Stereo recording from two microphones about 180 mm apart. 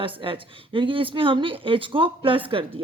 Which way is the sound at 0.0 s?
30° right (ahead or behind).